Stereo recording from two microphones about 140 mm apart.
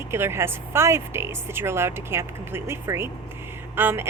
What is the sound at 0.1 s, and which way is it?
Speech, 15° right (ahead or behind).